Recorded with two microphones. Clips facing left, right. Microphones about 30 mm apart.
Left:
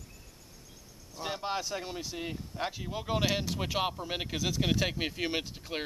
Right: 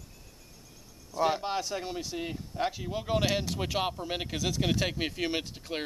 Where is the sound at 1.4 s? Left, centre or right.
Centre.